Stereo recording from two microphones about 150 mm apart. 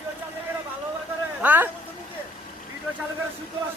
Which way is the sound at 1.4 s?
10° right (ahead or behind).